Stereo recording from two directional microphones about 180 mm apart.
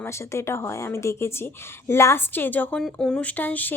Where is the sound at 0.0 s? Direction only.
15° left (ahead or behind).